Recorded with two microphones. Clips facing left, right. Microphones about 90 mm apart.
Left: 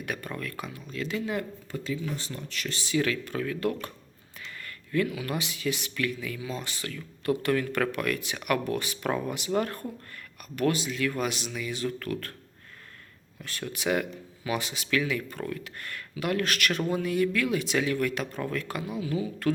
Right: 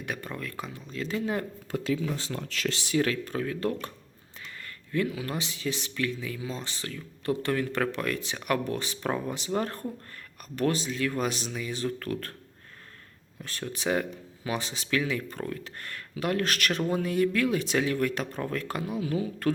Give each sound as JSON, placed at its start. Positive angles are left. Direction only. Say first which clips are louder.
{"t": 0.0, "sound": "speech", "louder": "left 1 dB", "side_deg": -20}
{"t": 1.7, "sound": "speech", "louder": "right 4 dB", "side_deg": -90}
{"t": 2.9, "sound": "speech", "louder": "even", "side_deg": -35}
{"t": 13.4, "sound": "speech", "louder": "even", "side_deg": -35}
{"t": 18.9, "sound": "speech", "louder": "even", "side_deg": -50}